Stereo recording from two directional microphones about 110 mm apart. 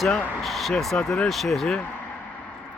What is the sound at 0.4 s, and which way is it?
Speech, centre (ahead or behind).